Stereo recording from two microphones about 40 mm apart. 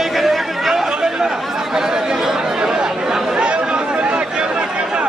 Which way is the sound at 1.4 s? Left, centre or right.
Centre.